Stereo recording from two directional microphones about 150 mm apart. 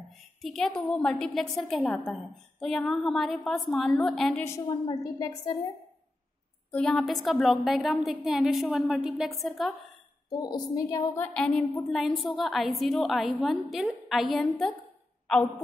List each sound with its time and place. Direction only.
0.4 s a woman's voice: centre (ahead or behind)
5.2 s a woman's voice: 25° left (ahead or behind)
6.7 s a woman's voice: 5° left (ahead or behind)
10.3 s a woman's voice: 25° left (ahead or behind)
11.3 s a woman's voice: 5° left (ahead or behind)